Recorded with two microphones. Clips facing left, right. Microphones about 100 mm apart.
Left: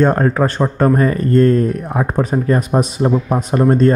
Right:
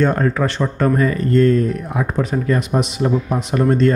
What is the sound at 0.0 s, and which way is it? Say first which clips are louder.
Speech: left 3 dB; 40° left (ahead or behind).